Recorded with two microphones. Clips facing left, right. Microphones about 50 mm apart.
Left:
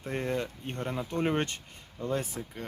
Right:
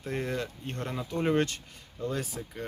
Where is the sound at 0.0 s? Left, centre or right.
Left.